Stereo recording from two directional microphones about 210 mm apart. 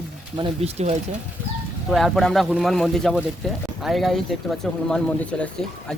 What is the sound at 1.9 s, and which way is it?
Speech, centre (ahead or behind).